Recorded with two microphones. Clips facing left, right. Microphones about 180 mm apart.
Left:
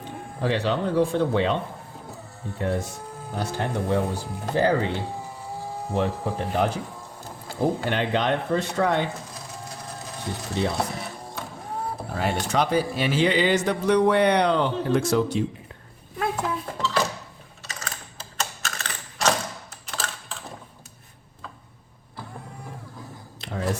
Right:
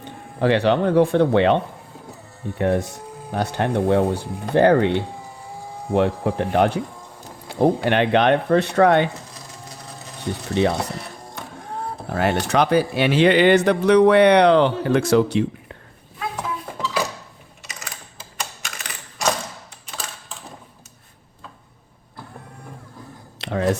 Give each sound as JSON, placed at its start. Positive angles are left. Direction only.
{"t": 0.0, "sound": "speech", "side_deg": -70}
{"t": 2.6, "sound": "speech", "side_deg": -65}
{"t": 9.3, "sound": "a sound", "side_deg": 0}
{"t": 10.5, "sound": "speech", "side_deg": -70}
{"t": 10.8, "sound": "speech", "side_deg": 0}
{"t": 12.1, "sound": "speech", "side_deg": -70}
{"t": 16.8, "sound": "dishes", "side_deg": -10}
{"t": 17.7, "sound": "typing", "side_deg": -15}
{"t": 23.4, "sound": "a sound", "side_deg": -75}